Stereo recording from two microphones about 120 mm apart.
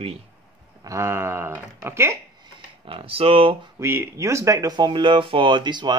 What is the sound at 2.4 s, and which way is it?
Speech, 45° right (ahead or behind).